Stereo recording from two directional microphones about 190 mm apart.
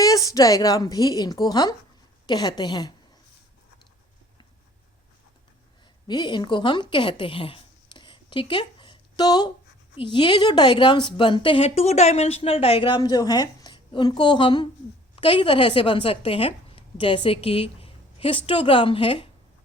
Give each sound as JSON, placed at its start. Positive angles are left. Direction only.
{"t": 0.0, "sound": "a woman's voice", "side_deg": 20}
{"t": 6.1, "sound": "a woman's voice", "side_deg": 25}